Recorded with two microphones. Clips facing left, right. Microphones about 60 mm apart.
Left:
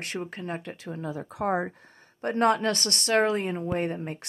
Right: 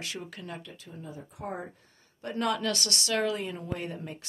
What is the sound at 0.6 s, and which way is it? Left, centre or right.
Speech, left.